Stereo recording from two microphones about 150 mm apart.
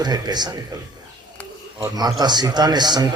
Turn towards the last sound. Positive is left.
turn(degrees=-30)  # may be behind; listen again after turning